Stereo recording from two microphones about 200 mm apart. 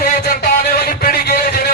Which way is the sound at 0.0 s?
50° left (ahead or behind).